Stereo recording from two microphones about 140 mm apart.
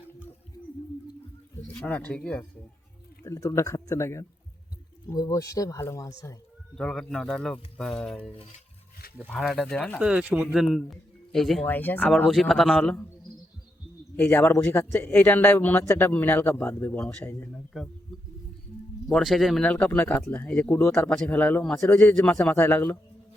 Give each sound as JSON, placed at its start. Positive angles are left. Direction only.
{"t": 1.8, "sound": "speech", "side_deg": 10}
{"t": 3.2, "sound": "speech", "side_deg": 25}
{"t": 6.7, "sound": "speech", "side_deg": 5}
{"t": 8.3, "sound": "speech", "side_deg": 45}
{"t": 9.4, "sound": "speech", "side_deg": 0}
{"t": 10.0, "sound": "speech", "side_deg": -10}
{"t": 11.6, "sound": "speech", "side_deg": 15}
{"t": 12.8, "sound": "speech", "side_deg": 10}
{"t": 14.2, "sound": "speech", "side_deg": 15}
{"t": 19.0, "sound": "speech", "side_deg": 0}
{"t": 22.5, "sound": "speech", "side_deg": 15}